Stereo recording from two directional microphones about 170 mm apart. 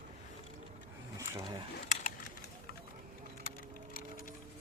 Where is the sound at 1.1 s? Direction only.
20° right (ahead or behind).